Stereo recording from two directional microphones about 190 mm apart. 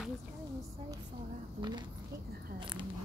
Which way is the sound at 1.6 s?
25° right (ahead or behind).